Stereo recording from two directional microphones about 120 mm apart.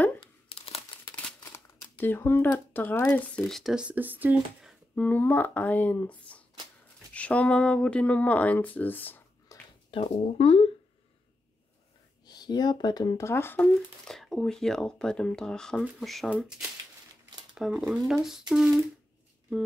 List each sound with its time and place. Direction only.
0.5 s crumpling: 55° left (ahead or behind)
2.0 s speech: 15° left (ahead or behind)
3.5 s speech: 5° right (ahead or behind)
4.9 s speech: 15° left (ahead or behind)
9.5 s a sound: 30° left (ahead or behind)
9.8 s speech: 50° left (ahead or behind)
12.3 s speech: 35° left (ahead or behind)
13.3 s speech: 20° left (ahead or behind)
14.0 s speech: 5° left (ahead or behind)
17.6 s speech: 5° right (ahead or behind)